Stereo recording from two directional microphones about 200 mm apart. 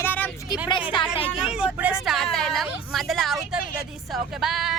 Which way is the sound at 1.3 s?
5° right (ahead or behind).